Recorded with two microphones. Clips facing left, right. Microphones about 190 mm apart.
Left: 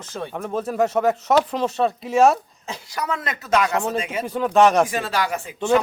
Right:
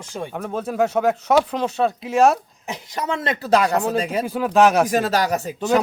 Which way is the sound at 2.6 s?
25° right (ahead or behind).